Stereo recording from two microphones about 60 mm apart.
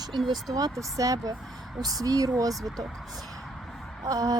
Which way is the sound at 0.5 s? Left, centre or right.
Right.